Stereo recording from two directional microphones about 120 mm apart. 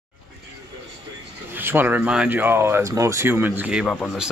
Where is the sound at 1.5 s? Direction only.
20° right (ahead or behind).